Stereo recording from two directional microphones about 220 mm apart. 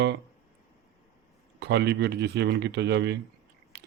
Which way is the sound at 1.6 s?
50° right (ahead or behind).